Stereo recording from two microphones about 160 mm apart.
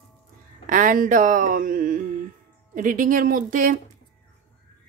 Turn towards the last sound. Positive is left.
turn(degrees=-60)  # may be behind; listen again after turning